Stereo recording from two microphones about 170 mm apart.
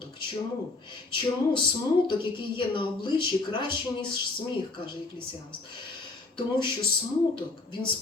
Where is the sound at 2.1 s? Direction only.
30° left (ahead or behind).